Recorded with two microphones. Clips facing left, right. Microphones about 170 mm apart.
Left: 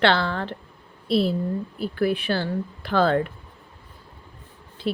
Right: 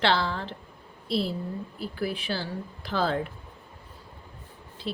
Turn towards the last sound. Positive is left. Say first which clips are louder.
# left 7 dB
turn(degrees=60)  # may be behind; listen again after turning